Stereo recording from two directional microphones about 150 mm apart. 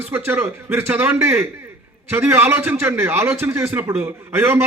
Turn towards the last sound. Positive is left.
turn(degrees=-15)  # may be behind; listen again after turning